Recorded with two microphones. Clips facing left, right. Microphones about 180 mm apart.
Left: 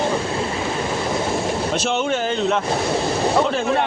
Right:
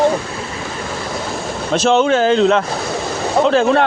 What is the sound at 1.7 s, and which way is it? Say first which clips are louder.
Speech: right 12 dB; 90° right.